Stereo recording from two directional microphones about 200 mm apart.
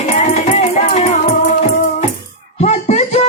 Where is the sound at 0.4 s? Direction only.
35° left (ahead or behind).